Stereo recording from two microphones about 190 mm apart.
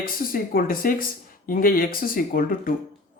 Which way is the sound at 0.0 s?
50° left (ahead or behind).